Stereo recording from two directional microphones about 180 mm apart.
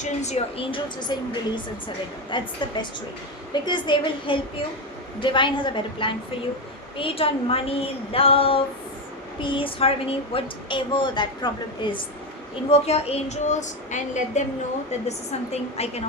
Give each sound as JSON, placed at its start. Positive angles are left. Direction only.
{"t": 0.0, "sound": "a woman's voice", "side_deg": 40}
{"t": 2.3, "sound": "a woman's voice", "side_deg": 25}